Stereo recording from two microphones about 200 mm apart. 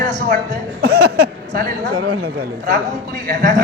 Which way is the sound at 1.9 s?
90° right.